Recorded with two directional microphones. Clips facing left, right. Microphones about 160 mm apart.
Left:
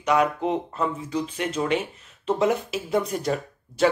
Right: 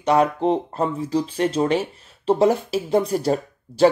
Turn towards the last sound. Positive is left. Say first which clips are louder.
# right 5 dB
turn(degrees=-30)  # may be behind; listen again after turning